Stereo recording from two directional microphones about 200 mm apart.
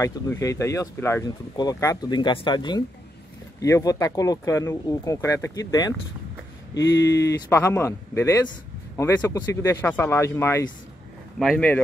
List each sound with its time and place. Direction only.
0.0 s speech: 15° left (ahead or behind)
7.1 s speech: 15° left (ahead or behind)